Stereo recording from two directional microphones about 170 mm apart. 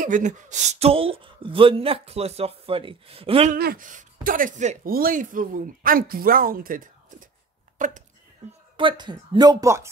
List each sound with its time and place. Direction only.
0.0 s speech: 50° right (ahead or behind)
3.5 s speech: 60° right (ahead or behind); by 8.6 s 40° right (ahead or behind)
8.7 s speech: 30° right (ahead or behind)